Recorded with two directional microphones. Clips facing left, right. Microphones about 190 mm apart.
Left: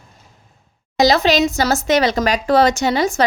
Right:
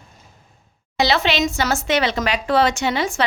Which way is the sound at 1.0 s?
40° left (ahead or behind).